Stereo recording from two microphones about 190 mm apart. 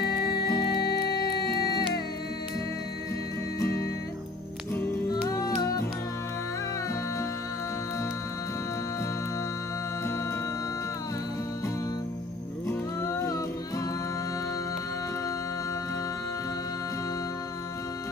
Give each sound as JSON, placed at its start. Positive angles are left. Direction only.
{"t": 0.0, "sound": "music", "side_deg": 55}
{"t": 1.4, "sound": "music", "side_deg": 20}
{"t": 4.7, "sound": "music", "side_deg": 10}
{"t": 12.6, "sound": "music", "side_deg": 15}